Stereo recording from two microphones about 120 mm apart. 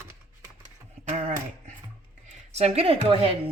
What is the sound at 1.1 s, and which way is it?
Dog, 90° right.